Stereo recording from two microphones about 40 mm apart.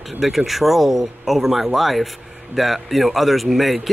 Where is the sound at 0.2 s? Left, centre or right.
Centre.